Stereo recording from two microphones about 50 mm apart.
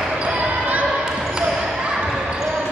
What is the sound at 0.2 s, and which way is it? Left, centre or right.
Basketball bounce, right.